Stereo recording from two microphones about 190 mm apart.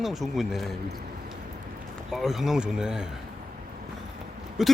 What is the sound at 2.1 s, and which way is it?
Speech, centre (ahead or behind).